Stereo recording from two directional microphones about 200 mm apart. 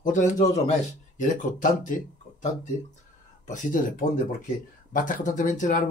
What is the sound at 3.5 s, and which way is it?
Speech, 40° left (ahead or behind).